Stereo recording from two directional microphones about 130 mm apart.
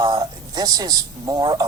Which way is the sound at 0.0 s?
30° right (ahead or behind).